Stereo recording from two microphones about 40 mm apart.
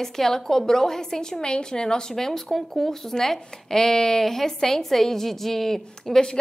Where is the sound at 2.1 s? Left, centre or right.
Centre.